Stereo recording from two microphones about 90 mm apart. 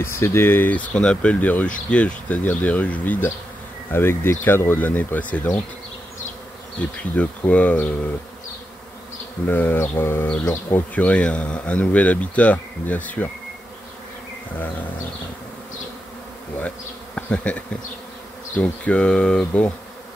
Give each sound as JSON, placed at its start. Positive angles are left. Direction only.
{"t": 0.0, "sound": "speech", "side_deg": 30}
{"t": 7.2, "sound": "speech", "side_deg": 15}
{"t": 9.5, "sound": "speech", "side_deg": 20}
{"t": 11.0, "sound": "speech", "side_deg": 15}
{"t": 16.5, "sound": "bee", "side_deg": 15}
{"t": 18.6, "sound": "speech", "side_deg": 15}